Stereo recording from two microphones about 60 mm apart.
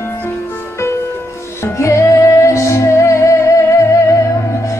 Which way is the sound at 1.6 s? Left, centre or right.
Left.